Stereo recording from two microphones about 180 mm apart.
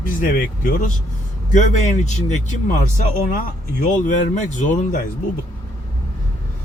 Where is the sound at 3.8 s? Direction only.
45° left (ahead or behind).